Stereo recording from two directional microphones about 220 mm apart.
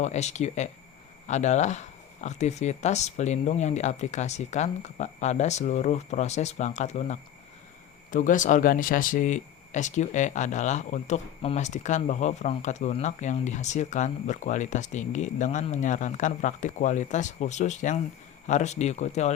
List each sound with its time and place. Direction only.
0.0 s speech: 30° left (ahead or behind)